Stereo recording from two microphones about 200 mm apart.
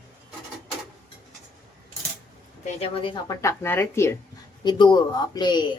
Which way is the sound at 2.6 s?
30° left (ahead or behind).